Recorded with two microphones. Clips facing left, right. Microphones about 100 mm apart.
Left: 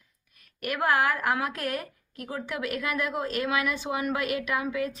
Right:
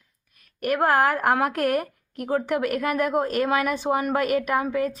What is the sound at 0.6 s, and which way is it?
A woman's voice, 45° right (ahead or behind).